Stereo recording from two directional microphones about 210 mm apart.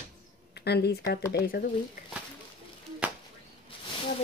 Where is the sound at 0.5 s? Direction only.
50° left (ahead or behind).